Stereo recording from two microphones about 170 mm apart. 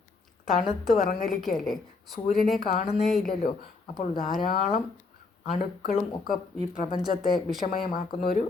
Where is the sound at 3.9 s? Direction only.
55° left (ahead or behind).